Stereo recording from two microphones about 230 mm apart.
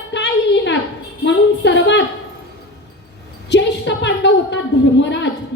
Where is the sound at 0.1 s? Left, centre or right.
Left.